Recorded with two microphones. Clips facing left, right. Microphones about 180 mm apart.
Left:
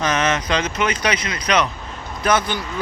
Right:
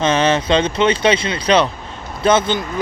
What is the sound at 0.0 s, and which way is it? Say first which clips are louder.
Speech: right 5 dB; 30° right (ahead or behind).